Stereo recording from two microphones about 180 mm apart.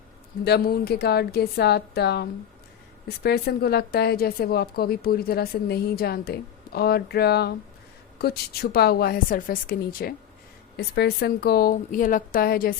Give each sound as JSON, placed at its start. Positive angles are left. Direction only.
{"t": 0.4, "sound": "a woman's voice", "side_deg": 60}
{"t": 10.8, "sound": "a woman's voice", "side_deg": 65}